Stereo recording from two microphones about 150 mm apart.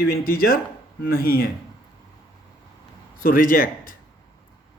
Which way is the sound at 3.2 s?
70° left (ahead or behind).